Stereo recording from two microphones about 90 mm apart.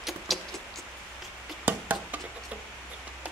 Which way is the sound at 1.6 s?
20° right (ahead or behind).